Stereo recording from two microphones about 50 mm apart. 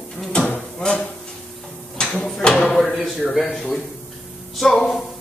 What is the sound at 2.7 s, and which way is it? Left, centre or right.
Speech, centre.